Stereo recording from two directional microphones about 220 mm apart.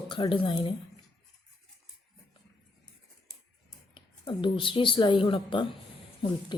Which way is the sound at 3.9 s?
20° left (ahead or behind).